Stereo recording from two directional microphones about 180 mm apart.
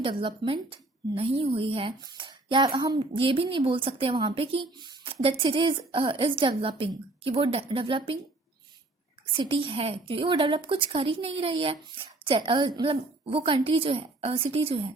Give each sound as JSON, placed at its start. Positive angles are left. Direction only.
{"t": 0.0, "sound": "a woman's voice", "side_deg": -30}
{"t": 9.3, "sound": "a woman's voice", "side_deg": -30}